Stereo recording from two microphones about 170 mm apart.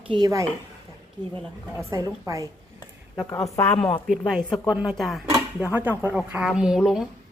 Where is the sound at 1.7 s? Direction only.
15° right (ahead or behind).